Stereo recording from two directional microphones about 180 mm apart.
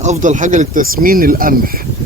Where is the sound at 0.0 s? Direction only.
40° right (ahead or behind).